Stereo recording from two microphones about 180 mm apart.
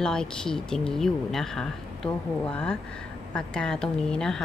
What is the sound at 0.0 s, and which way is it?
A woman's voice, 5° left (ahead or behind).